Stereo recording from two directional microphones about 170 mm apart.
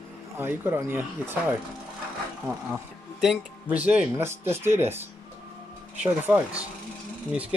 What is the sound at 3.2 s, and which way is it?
Speech, 5° right (ahead or behind).